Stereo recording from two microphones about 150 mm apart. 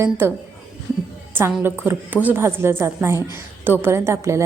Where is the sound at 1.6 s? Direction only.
15° right (ahead or behind).